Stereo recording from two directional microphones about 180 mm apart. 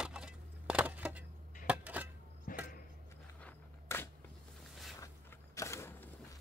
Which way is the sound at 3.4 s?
10° left (ahead or behind).